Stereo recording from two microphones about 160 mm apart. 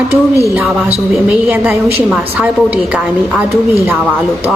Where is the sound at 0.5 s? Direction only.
5° right (ahead or behind).